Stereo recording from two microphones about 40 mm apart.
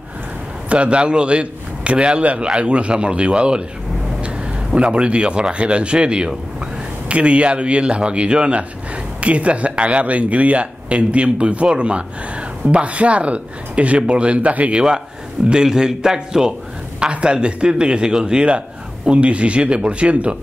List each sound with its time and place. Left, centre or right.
0.7 s a man's voice: right
4.7 s a man's voice: right
15.5 s a man's voice: centre
17.0 s a man's voice: right